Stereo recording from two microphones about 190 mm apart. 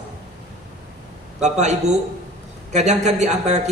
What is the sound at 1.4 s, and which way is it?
A man's voice, 35° right (ahead or behind).